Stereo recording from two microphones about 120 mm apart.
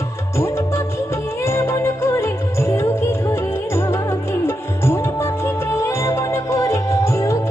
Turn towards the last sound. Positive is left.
turn(degrees=25)  # may be behind; listen again after turning